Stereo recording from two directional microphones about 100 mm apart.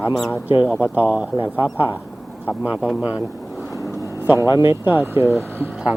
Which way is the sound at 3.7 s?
35° left (ahead or behind).